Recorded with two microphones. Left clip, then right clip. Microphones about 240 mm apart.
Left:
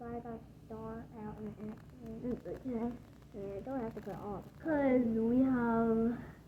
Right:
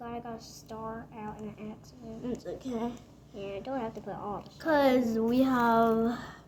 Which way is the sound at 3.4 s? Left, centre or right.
Right.